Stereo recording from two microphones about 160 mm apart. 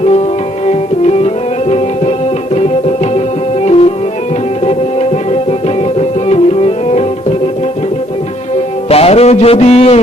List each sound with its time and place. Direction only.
0.6 s music: 40° left (ahead or behind)
8.9 s music: 40° left (ahead or behind)